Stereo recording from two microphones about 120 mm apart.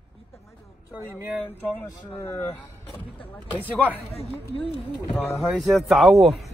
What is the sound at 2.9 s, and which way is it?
Speech, 45° left (ahead or behind).